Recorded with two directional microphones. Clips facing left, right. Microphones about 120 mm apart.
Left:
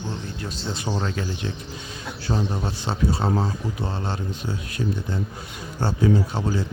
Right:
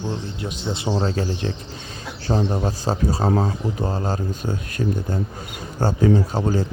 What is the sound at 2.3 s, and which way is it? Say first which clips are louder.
Speech: right 5 dB; 20° right (ahead or behind).